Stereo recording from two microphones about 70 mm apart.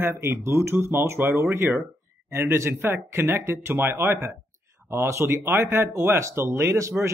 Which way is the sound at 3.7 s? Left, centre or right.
Right.